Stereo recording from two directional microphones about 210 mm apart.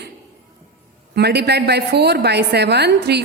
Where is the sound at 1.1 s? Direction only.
50° right (ahead or behind).